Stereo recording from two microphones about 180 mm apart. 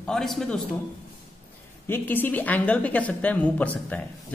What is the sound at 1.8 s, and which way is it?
Speech, 10° left (ahead or behind).